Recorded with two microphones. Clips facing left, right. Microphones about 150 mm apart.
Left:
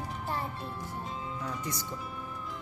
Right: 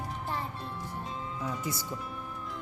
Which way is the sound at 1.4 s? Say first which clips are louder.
Right 2 dB; 10° right (ahead or behind).